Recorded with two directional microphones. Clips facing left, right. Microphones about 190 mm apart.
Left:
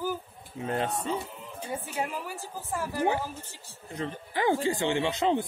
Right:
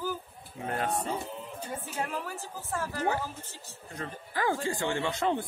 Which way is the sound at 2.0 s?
15° left (ahead or behind).